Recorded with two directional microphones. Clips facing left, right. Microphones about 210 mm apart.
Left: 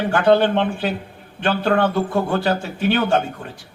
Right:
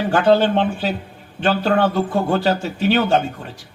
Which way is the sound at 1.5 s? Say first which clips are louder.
Even; 55° left (ahead or behind).